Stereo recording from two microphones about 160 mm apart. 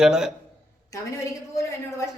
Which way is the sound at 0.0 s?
5° right (ahead or behind).